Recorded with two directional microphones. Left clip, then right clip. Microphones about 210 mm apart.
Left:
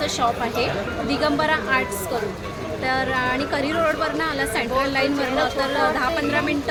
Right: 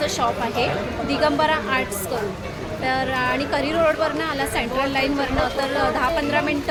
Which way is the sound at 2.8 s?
Centre (ahead or behind).